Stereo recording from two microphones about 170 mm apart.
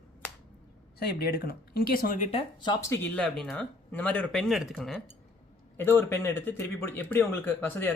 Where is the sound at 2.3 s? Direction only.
35° left (ahead or behind).